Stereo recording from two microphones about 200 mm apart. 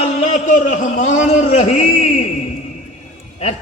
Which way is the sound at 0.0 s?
35° left (ahead or behind).